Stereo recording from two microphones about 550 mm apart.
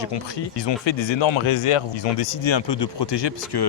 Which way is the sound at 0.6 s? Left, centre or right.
Left.